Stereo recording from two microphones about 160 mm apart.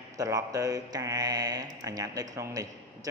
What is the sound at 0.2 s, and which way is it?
Speech, 20° right (ahead or behind).